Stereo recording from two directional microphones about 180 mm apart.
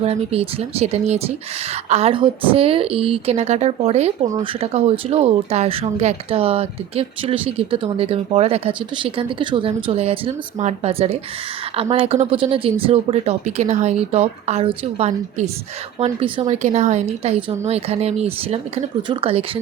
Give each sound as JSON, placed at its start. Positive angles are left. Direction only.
{"t": 0.0, "sound": "speech", "side_deg": -35}